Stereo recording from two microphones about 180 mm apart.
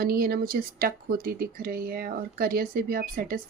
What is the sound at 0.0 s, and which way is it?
A woman's voice, 55° right (ahead or behind).